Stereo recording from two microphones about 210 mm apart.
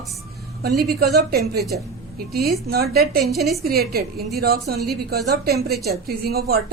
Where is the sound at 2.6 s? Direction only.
50° right (ahead or behind).